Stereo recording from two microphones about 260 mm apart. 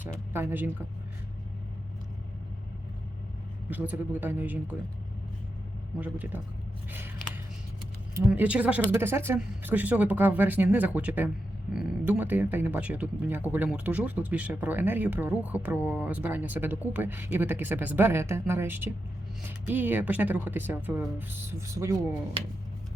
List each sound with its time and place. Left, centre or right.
0.3 s speech: centre
3.7 s speech: centre
6.0 s speech: centre
8.1 s speech: centre; by 22.5 s right